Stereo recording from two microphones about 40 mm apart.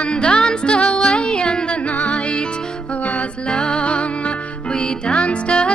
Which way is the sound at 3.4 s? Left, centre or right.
Left.